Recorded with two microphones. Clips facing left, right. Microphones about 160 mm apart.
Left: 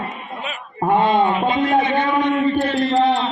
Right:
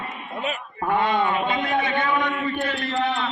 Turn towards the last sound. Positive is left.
turn(degrees=30)  # may be behind; listen again after turning